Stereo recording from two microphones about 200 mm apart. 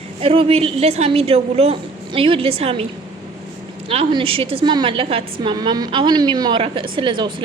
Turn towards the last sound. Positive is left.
turn(degrees=-25)  # may be behind; listen again after turning